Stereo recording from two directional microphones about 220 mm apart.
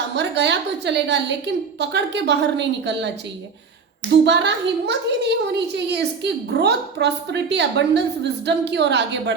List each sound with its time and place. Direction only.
0.2 s a woman's voice: 50° right (ahead or behind)
4.3 s a woman's voice: 50° right (ahead or behind)